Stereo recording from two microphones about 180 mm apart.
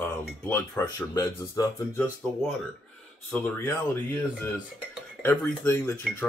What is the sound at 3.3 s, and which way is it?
Speech, 10° left (ahead or behind).